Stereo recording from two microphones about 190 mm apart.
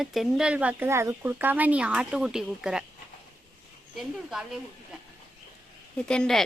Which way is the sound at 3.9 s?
Centre (ahead or behind).